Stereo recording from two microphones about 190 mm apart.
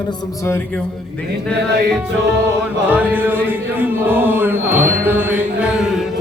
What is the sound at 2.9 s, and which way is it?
Chant, 10° right (ahead or behind).